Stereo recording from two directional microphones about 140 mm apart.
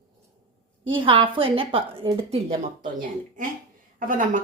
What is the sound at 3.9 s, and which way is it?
Speech, 75° right (ahead or behind).